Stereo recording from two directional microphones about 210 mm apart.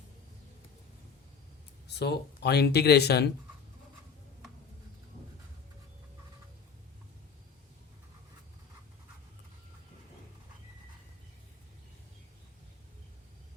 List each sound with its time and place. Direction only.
2.0 s speech: 50° left (ahead or behind)